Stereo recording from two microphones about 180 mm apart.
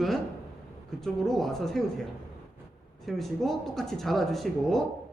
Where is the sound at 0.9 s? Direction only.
Centre (ahead or behind).